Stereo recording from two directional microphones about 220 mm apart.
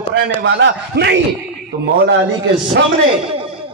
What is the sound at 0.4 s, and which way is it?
Speech, 50° right (ahead or behind).